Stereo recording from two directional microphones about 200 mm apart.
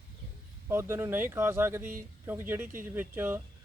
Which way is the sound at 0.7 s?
10° right (ahead or behind).